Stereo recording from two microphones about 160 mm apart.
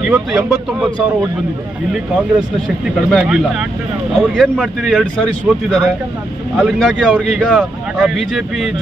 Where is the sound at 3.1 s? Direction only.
5° right (ahead or behind).